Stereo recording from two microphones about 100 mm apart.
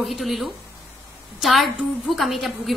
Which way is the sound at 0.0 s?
Centre (ahead or behind).